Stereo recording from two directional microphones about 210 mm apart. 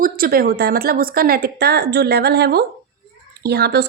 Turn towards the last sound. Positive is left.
turn(degrees=-50)  # may be behind; listen again after turning